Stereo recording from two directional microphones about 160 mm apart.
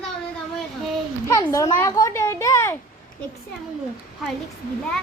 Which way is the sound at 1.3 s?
20° left (ahead or behind).